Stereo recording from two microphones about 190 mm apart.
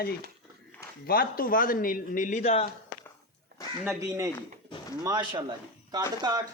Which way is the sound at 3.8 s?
15° right (ahead or behind).